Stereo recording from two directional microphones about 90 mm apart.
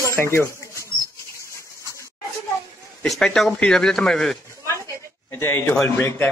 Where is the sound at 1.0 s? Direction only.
35° left (ahead or behind).